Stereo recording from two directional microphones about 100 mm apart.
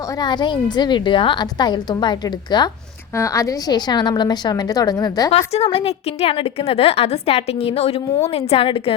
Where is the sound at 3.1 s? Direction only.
30° left (ahead or behind).